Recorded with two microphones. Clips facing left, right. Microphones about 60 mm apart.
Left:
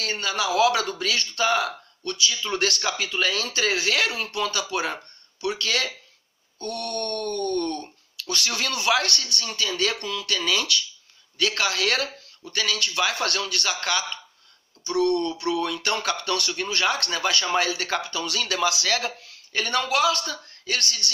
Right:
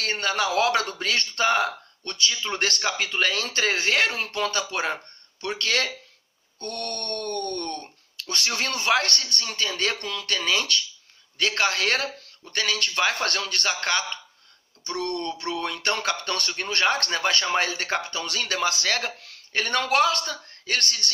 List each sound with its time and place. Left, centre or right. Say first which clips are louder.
0.0 s speech: right 1 dB; right
2.4 s speech: left 2 dB; right
8.3 s a man's voice: even; right